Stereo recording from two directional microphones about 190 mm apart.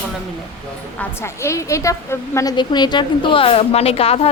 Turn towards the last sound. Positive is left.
turn(degrees=30)  # may be behind; listen again after turning